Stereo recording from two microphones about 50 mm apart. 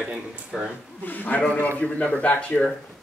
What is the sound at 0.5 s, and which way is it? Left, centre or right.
Speech, centre.